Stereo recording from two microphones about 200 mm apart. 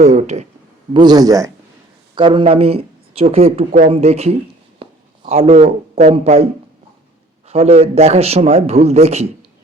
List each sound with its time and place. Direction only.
0.0 s speech: 35° right (ahead or behind)
0.9 s a man's voice: 20° right (ahead or behind)